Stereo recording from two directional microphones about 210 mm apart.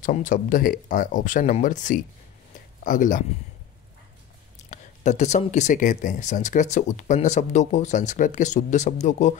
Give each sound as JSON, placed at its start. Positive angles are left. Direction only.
{"t": 0.0, "sound": "speech", "side_deg": 40}
{"t": 4.6, "sound": "speech", "side_deg": 35}